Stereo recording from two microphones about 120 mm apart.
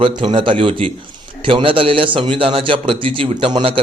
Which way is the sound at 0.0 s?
45° right (ahead or behind).